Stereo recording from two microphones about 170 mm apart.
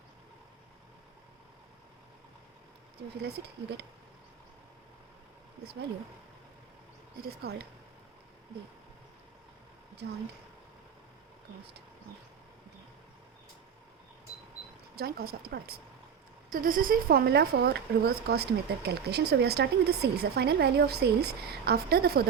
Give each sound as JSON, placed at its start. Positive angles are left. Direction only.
{"t": 3.2, "sound": "speech", "side_deg": -75}
{"t": 7.2, "sound": "speech", "side_deg": -65}
{"t": 14.9, "sound": "speech", "side_deg": -65}
{"t": 16.5, "sound": "speech", "side_deg": -55}